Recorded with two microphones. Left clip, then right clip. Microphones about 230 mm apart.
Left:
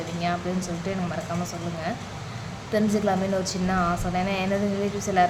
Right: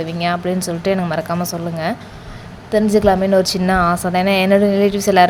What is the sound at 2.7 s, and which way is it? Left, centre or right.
A woman's voice, right.